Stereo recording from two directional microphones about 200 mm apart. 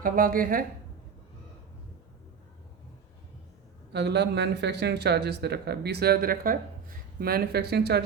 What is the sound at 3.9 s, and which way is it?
Speech, 55° right (ahead or behind).